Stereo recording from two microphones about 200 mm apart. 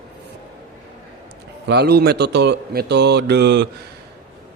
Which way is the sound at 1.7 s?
55° right (ahead or behind).